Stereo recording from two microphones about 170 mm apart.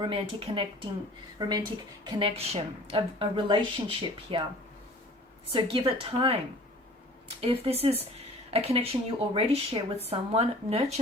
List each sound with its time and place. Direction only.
0.0 s a woman's voice: 30° right (ahead or behind)
5.5 s a woman's voice: 30° right (ahead or behind)
7.4 s a woman's voice: 35° right (ahead or behind)